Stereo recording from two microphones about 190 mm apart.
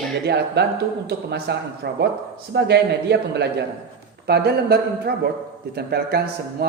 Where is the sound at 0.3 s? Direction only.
60° right (ahead or behind).